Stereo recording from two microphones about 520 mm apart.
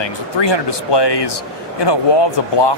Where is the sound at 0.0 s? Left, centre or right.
Left.